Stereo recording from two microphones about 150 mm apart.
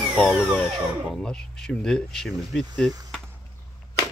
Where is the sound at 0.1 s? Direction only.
Centre (ahead or behind).